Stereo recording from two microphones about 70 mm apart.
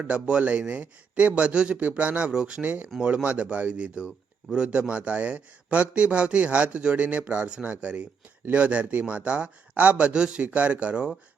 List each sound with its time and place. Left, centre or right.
0.0 s a man's voice: centre
2.6 s a man's voice: right